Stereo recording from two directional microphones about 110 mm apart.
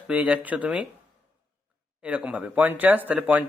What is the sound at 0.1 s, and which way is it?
Speech, 15° right (ahead or behind).